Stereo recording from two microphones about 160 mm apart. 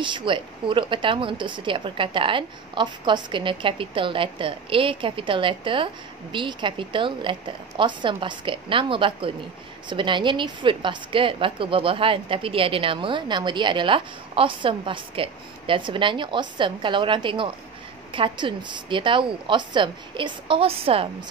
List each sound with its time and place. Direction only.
0.0 s a woman's voice: 30° right (ahead or behind)